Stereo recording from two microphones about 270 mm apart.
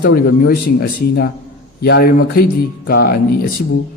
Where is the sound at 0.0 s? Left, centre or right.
Left.